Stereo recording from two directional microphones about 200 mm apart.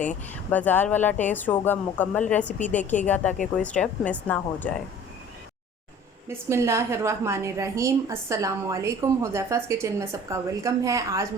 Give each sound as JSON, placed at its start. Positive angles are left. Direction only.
{"t": 0.5, "sound": "a woman's voice", "side_deg": 10}
{"t": 6.2, "sound": "a woman's voice", "side_deg": -15}